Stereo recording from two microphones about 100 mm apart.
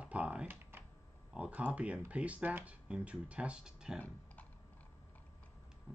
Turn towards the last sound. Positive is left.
turn(degrees=15)  # may be behind; listen again after turning